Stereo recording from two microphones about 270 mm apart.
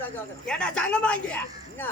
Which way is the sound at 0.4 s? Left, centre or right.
Centre.